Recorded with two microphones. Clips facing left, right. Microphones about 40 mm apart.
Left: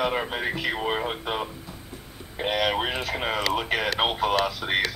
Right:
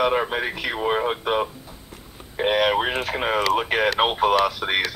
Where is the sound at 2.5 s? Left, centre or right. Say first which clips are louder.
Right 5 dB; right.